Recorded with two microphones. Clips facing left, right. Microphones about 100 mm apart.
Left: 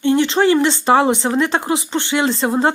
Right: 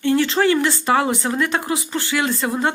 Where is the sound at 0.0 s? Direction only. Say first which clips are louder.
Left 3 dB; 20° left (ahead or behind).